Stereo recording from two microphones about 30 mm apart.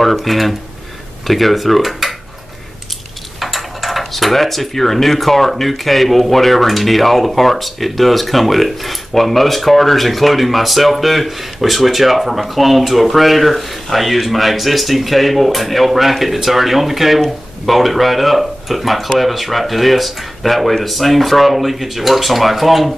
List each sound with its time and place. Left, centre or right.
0.0 s speech: centre
3.3 s speech: centre